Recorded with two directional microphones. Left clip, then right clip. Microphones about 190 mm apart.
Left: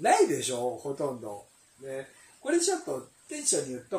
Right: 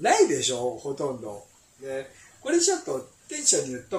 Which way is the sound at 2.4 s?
20° left (ahead or behind).